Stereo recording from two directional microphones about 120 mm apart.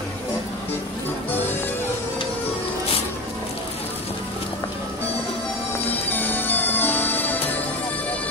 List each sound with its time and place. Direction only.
5.9 s music: 15° left (ahead or behind)